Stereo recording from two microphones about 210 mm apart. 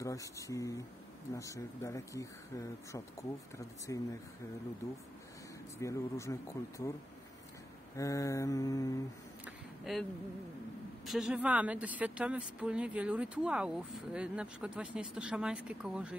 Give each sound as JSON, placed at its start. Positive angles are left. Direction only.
{"t": 0.0, "sound": "speech", "side_deg": 15}
{"t": 5.8, "sound": "speech", "side_deg": 15}
{"t": 7.9, "sound": "speech", "side_deg": 15}
{"t": 9.4, "sound": "a sound", "side_deg": 0}
{"t": 11.1, "sound": "speech", "side_deg": 0}